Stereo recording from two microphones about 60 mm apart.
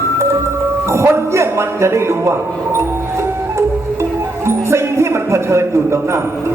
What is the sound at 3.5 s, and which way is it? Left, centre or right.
Music, right.